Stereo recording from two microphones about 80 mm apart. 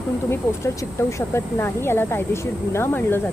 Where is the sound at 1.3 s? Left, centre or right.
Left.